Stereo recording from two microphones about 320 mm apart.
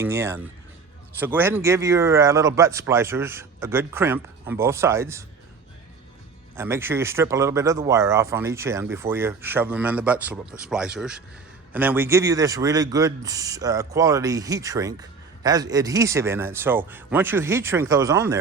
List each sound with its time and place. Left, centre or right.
0.0 s speech: centre
6.6 s speech: centre